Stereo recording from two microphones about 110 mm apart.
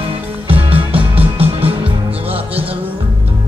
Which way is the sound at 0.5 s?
55° right (ahead or behind).